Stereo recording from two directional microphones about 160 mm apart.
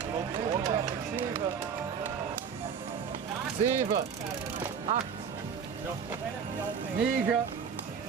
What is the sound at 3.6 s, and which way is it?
Speech, 50° right (ahead or behind).